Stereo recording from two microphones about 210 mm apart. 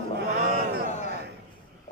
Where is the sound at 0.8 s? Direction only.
35° left (ahead or behind).